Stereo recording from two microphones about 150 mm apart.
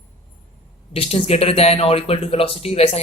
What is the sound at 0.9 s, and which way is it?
Speech, 40° left (ahead or behind).